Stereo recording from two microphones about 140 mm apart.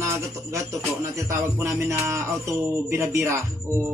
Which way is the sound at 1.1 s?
20° right (ahead or behind).